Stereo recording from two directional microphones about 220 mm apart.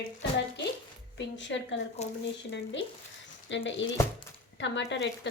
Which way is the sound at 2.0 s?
30° left (ahead or behind).